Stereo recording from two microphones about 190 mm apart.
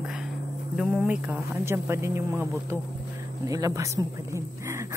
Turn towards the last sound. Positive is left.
turn(degrees=-15)  # may be behind; listen again after turning